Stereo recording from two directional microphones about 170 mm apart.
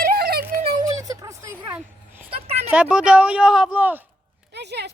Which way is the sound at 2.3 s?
35° right (ahead or behind).